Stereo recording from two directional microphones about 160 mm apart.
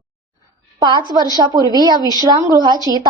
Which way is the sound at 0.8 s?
25° right (ahead or behind).